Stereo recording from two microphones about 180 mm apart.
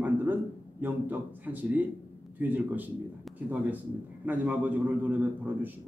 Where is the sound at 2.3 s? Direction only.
10° right (ahead or behind).